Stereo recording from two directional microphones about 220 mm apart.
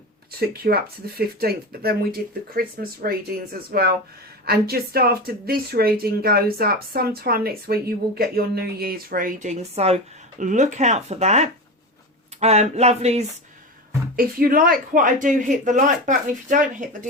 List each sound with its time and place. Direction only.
0.3 s speech: 45° right (ahead or behind)
14.2 s speech: 45° right (ahead or behind)